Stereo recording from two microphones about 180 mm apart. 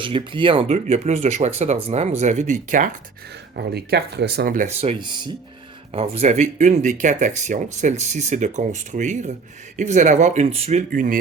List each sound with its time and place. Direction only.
0.0 s speech: 30° right (ahead or behind); by 2.9 s 45° right (ahead or behind)
3.5 s speech: 65° right (ahead or behind)
4.8 s speech: 30° right (ahead or behind)
5.9 s speech: 35° right (ahead or behind)